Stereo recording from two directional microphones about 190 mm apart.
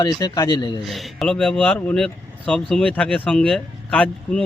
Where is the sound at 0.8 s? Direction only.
Centre (ahead or behind).